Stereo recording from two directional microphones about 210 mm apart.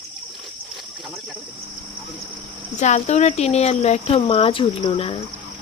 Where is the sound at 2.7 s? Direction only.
35° left (ahead or behind).